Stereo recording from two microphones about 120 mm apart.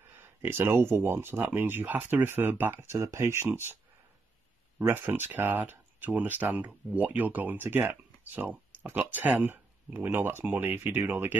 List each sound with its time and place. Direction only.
0.2 s speech: 20° right (ahead or behind)
4.7 s speech: 15° right (ahead or behind)